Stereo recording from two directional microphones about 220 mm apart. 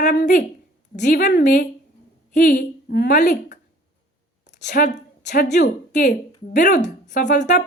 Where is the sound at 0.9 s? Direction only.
35° left (ahead or behind).